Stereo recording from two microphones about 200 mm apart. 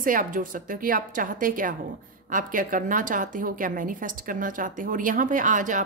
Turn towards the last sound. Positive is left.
turn(degrees=-40)  # may be behind; listen again after turning